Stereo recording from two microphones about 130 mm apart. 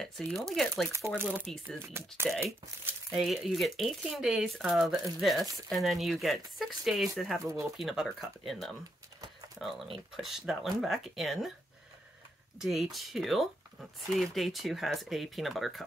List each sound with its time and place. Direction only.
0.5 s speech: centre (ahead or behind)
0.9 s speech: 20° right (ahead or behind)
1.4 s speech: 5° left (ahead or behind)
1.8 s speech: 20° right (ahead or behind)
3.1 s speech: centre (ahead or behind)
12.5 s speech: 5° right (ahead or behind)